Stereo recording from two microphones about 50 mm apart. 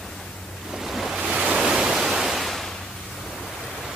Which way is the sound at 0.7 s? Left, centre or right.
Centre.